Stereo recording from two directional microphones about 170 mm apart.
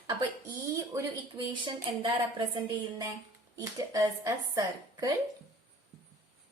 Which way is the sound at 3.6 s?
20° right (ahead or behind).